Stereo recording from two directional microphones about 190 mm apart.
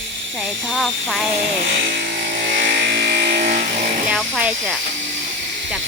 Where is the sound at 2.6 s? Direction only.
60° right (ahead or behind).